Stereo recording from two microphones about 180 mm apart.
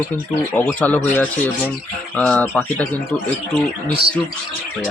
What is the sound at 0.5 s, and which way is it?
Speech, 10° left (ahead or behind).